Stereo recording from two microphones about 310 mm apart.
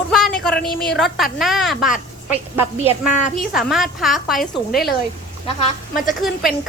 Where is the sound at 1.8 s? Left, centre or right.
Left.